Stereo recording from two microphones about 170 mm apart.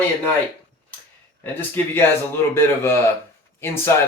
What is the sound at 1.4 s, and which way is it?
Speech, 10° left (ahead or behind).